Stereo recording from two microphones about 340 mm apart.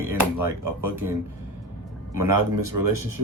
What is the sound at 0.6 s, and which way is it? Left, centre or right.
Speech, right.